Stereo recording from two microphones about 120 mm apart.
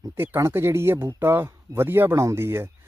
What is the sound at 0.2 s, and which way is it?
Speech, 20° right (ahead or behind).